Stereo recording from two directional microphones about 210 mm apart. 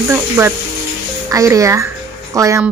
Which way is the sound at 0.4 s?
15° right (ahead or behind).